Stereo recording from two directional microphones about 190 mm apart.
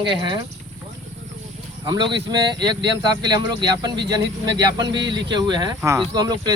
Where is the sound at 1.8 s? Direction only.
25° right (ahead or behind).